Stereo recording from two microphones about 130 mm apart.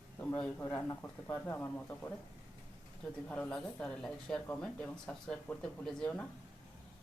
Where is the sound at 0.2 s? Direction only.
10° left (ahead or behind).